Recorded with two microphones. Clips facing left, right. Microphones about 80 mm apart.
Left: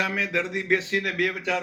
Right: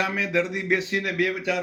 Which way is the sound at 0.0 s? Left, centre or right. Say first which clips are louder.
Right 2 dB; right.